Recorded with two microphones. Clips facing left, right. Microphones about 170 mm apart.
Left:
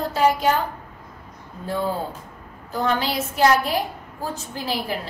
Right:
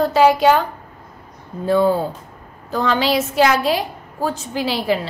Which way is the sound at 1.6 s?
85° right.